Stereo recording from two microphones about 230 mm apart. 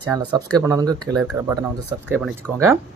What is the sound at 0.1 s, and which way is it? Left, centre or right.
Speech, centre.